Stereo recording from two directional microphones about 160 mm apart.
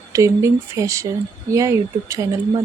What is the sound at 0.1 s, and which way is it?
Speech, 20° right (ahead or behind).